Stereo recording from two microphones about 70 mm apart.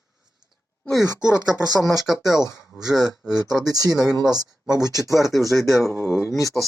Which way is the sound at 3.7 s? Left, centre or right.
Right.